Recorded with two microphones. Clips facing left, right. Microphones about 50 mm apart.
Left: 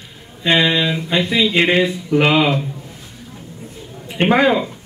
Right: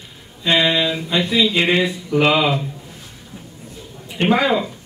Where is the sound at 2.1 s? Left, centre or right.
Centre.